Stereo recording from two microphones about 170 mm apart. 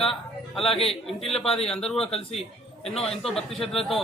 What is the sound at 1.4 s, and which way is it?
Speech, 35° left (ahead or behind).